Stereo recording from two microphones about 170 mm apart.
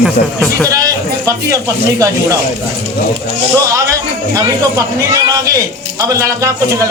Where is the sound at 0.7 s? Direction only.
20° right (ahead or behind).